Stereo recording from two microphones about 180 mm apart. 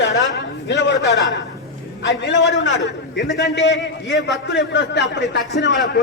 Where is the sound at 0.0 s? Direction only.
80° left.